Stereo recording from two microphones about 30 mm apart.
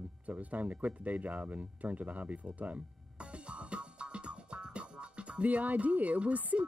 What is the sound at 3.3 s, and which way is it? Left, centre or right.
Music, right.